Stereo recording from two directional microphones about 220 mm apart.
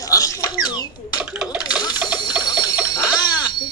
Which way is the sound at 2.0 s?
5° right (ahead or behind).